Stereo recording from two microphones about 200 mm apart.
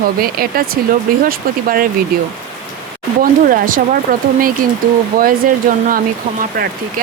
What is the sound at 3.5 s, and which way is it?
Speech, 45° right (ahead or behind).